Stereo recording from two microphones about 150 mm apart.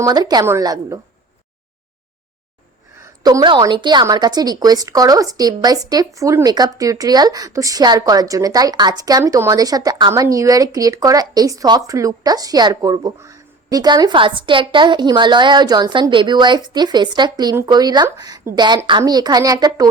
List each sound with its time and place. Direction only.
0.0 s a woman's voice: 25° right (ahead or behind)
3.0 s a woman's voice: 25° right (ahead or behind)